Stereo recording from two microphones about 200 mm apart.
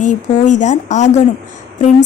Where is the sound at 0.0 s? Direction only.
40° left (ahead or behind).